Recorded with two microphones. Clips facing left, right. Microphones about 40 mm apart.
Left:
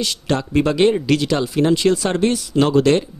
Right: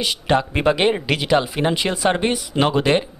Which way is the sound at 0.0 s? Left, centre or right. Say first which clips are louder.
Right 2 dB; centre.